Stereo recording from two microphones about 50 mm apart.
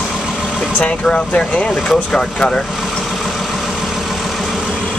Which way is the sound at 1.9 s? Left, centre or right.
Centre.